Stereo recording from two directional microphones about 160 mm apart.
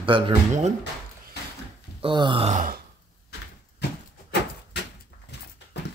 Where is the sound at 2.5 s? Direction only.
50° right (ahead or behind).